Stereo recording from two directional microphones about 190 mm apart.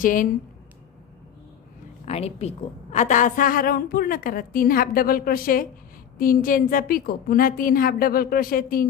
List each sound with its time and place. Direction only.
0.0 s a woman's voice: 45° left (ahead or behind)
2.0 s a woman's voice: 35° left (ahead or behind); by 8.8 s 50° left (ahead or behind)